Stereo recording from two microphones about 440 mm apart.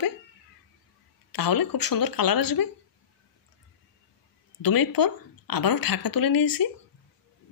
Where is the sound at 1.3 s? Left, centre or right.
Left.